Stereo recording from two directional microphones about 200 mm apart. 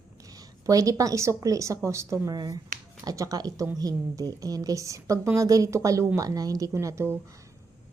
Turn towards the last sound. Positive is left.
turn(degrees=-15)  # may be behind; listen again after turning